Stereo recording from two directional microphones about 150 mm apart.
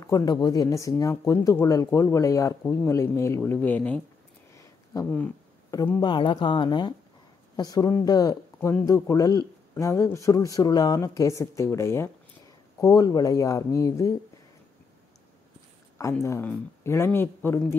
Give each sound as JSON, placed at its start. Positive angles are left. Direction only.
{"t": 0.0, "sound": "a man's voice", "side_deg": 25}
{"t": 5.9, "sound": "a woman's voice", "side_deg": 30}
{"t": 16.0, "sound": "a man's voice", "side_deg": 20}